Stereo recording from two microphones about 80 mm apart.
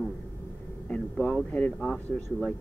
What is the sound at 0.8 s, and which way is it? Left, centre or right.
Speech, centre.